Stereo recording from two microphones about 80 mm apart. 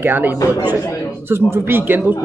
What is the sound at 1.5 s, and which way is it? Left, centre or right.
Speech, right.